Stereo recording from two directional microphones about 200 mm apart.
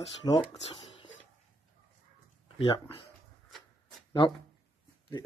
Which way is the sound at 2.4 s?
25° left (ahead or behind).